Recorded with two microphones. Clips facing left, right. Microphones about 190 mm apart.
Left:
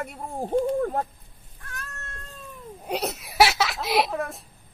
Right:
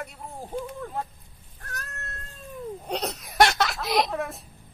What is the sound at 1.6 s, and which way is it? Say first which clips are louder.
Cat: right 1 dB; 40° right (ahead or behind).